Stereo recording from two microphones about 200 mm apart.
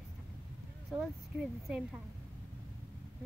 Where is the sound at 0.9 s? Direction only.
5° right (ahead or behind).